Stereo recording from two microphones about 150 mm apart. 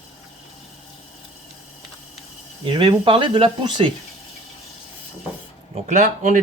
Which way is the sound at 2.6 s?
30° right (ahead or behind).